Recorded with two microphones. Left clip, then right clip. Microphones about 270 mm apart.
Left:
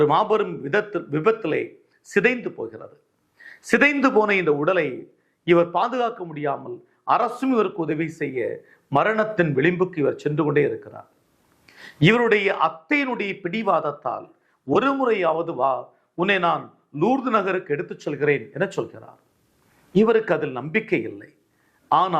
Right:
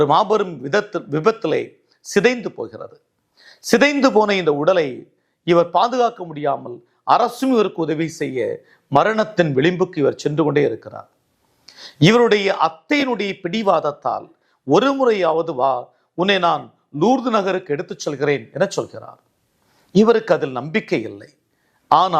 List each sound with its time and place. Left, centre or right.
0.0 s a man's voice: right